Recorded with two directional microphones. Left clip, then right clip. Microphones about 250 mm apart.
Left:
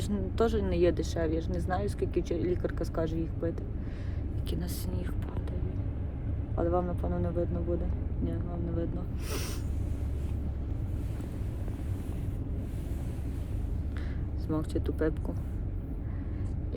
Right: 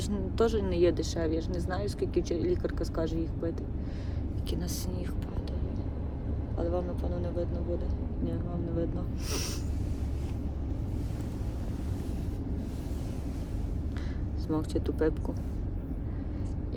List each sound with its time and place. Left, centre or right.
0.1 s speech: centre
4.5 s speech: centre
6.6 s speech: left
14.5 s speech: centre